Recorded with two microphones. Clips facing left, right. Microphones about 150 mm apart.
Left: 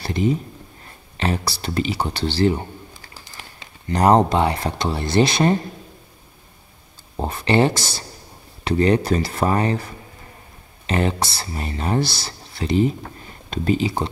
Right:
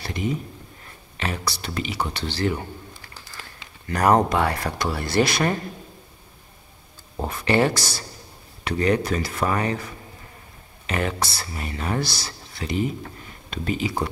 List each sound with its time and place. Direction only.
0.0 s speech: 30° left (ahead or behind)
7.2 s speech: 25° left (ahead or behind)
10.9 s speech: 30° left (ahead or behind)